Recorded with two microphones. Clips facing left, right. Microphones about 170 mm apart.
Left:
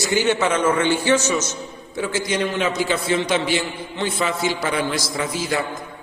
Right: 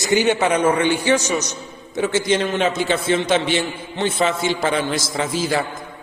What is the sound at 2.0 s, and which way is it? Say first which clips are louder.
A man's voice: right 4 dB; 25° right (ahead or behind).